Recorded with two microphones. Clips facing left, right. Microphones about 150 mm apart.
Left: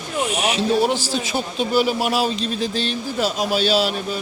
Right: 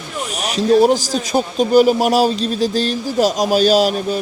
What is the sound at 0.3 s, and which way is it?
Speech, 40° right (ahead or behind).